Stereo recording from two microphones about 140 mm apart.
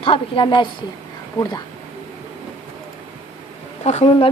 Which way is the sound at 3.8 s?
55° left (ahead or behind).